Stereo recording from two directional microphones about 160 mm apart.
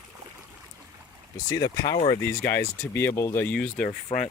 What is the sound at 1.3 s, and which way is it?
Speech, 20° left (ahead or behind).